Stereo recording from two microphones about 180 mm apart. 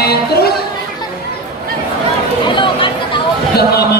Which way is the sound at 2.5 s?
25° left (ahead or behind).